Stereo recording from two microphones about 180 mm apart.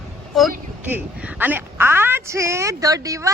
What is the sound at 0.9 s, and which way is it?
A woman's voice, 10° right (ahead or behind).